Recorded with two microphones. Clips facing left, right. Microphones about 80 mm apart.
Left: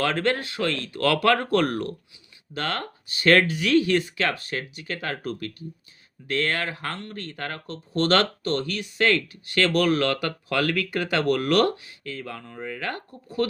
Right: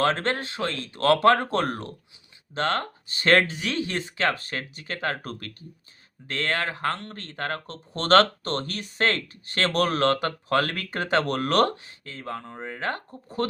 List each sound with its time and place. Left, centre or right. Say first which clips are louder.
0.0 s speech: even; right